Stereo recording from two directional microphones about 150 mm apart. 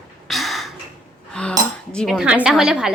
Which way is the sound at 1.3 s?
5° left (ahead or behind).